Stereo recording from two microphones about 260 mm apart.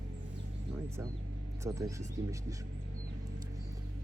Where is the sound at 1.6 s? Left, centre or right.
Centre.